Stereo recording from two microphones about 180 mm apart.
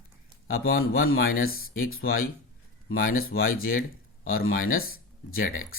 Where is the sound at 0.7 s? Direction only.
55° left (ahead or behind).